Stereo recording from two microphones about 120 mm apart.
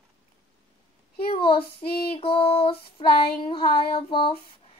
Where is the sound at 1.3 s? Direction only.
50° left (ahead or behind).